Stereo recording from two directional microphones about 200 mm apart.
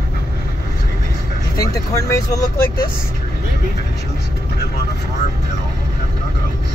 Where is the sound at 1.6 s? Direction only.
15° left (ahead or behind).